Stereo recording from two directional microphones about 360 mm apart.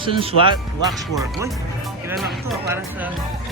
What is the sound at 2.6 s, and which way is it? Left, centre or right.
Speech, centre.